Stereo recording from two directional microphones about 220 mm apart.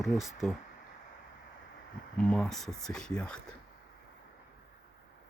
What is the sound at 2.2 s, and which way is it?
Speech, 5° left (ahead or behind).